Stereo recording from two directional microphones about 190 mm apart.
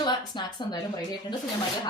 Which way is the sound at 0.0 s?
20° left (ahead or behind).